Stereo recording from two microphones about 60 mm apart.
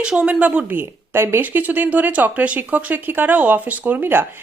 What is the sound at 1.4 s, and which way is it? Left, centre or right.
Speech, right.